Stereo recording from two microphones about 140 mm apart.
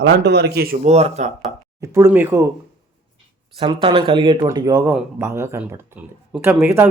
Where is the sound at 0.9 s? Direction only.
50° right (ahead or behind).